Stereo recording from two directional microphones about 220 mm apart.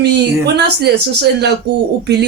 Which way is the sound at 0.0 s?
50° right (ahead or behind).